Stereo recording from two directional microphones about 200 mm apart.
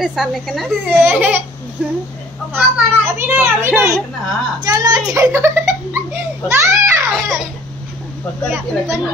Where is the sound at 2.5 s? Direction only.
10° right (ahead or behind).